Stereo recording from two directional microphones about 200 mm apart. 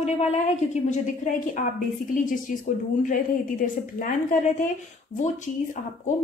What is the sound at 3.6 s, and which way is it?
A woman's voice, 40° left (ahead or behind).